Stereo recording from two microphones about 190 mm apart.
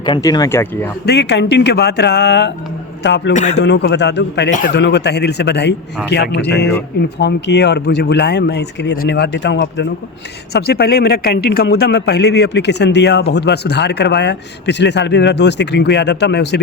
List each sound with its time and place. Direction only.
0.0 s speech: 20° left (ahead or behind)
1.0 s a man's voice: 60° left (ahead or behind)
3.3 s speech: 40° left (ahead or behind)
3.6 s a man's voice: 65° left (ahead or behind)
10.5 s a man's voice: 55° left (ahead or behind)